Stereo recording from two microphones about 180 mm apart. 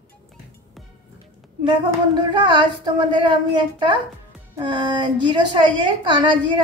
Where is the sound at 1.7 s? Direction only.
25° right (ahead or behind).